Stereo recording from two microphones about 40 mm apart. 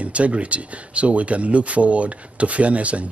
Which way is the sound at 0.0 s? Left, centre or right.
Right.